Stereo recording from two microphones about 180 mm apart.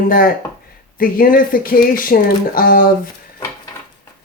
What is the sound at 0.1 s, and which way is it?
Speech, 55° left (ahead or behind).